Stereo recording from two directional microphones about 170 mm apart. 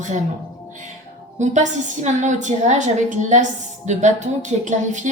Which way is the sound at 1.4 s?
45° right (ahead or behind).